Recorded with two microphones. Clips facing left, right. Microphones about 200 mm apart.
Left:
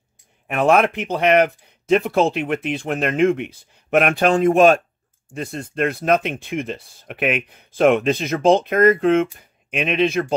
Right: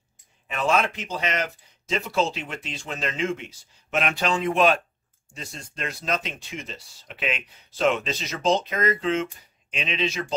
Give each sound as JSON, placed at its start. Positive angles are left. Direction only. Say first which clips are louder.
{"t": 0.5, "sound": "speech", "louder": "left 8 dB", "side_deg": 60}
{"t": 5.3, "sound": "speech", "louder": "left 12 dB", "side_deg": 55}